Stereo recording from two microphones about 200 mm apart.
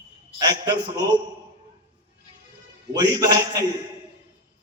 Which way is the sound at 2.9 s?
20° right (ahead or behind).